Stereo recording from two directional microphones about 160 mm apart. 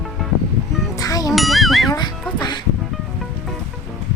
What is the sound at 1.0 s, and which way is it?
Music, 20° left (ahead or behind).